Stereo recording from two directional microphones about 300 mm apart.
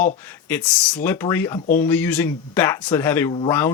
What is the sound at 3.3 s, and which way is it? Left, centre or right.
Speech, centre.